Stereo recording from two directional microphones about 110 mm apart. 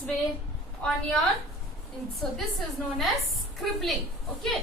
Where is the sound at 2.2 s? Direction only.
5° left (ahead or behind).